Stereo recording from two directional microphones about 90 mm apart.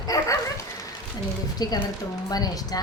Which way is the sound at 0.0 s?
40° left (ahead or behind).